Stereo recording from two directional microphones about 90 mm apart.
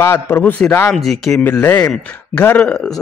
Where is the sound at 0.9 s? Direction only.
5° left (ahead or behind).